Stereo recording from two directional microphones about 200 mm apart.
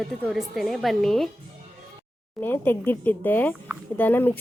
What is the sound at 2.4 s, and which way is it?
A woman's voice, 10° left (ahead or behind).